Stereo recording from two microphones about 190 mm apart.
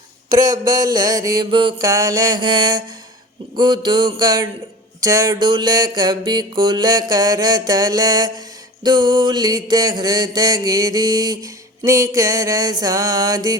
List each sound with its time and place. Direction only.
0.8 s music: 20° right (ahead or behind)